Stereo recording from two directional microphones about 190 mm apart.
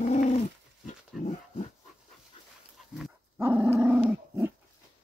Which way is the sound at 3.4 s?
15° right (ahead or behind).